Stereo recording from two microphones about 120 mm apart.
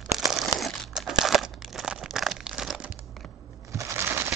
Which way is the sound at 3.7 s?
25° right (ahead or behind).